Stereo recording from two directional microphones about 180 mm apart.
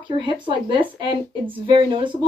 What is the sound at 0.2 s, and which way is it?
Speech, 25° right (ahead or behind).